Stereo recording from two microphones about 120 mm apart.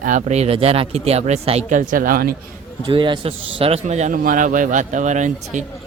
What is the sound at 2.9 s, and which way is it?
Speech, 45° right (ahead or behind).